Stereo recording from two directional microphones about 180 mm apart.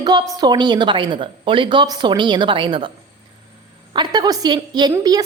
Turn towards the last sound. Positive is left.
turn(degrees=-20)  # may be behind; listen again after turning